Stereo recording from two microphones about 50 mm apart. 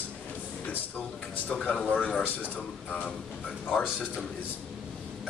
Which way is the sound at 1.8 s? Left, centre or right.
Left.